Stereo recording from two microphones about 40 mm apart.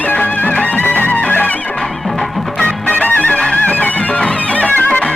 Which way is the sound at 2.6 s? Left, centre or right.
Left.